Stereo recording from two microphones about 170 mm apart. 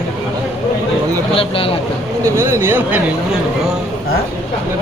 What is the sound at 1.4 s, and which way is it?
Speech, 30° left (ahead or behind).